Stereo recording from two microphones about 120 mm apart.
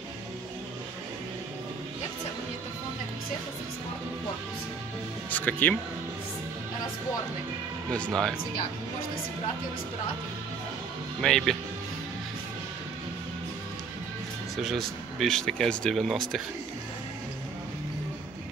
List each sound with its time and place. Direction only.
5.3 s speech: 15° left (ahead or behind)
7.9 s speech: 5° left (ahead or behind)
11.1 s speech: 5° left (ahead or behind)
14.6 s speech: centre (ahead or behind)